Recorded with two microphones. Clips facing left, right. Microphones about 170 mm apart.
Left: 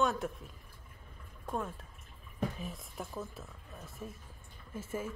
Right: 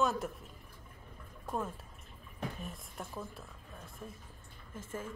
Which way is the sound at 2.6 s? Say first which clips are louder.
Left 2 dB; centre (ahead or behind).